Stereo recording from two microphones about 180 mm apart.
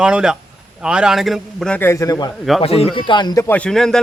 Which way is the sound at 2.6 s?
35° left (ahead or behind).